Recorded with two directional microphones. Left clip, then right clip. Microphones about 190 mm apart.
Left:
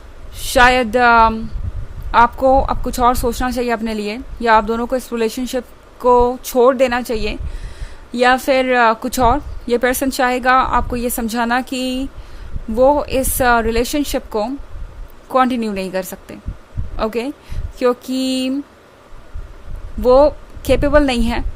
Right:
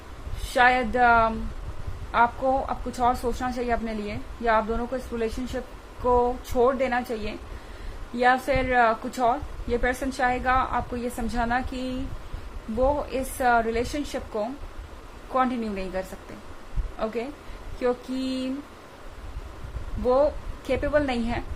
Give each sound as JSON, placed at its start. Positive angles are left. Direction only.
{"t": 0.5, "sound": "a woman's voice", "side_deg": 60}
{"t": 20.1, "sound": "a woman's voice", "side_deg": 60}